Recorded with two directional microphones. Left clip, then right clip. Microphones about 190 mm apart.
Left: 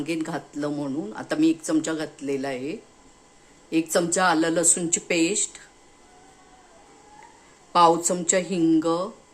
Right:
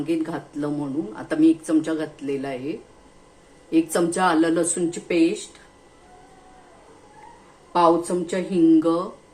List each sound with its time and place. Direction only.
0.0 s speech: 35° left (ahead or behind)
7.7 s speech: 30° left (ahead or behind)